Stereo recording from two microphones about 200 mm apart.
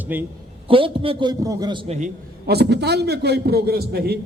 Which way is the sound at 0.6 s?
25° right (ahead or behind).